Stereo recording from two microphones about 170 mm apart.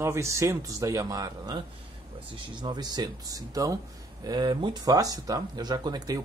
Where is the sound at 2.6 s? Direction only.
25° right (ahead or behind).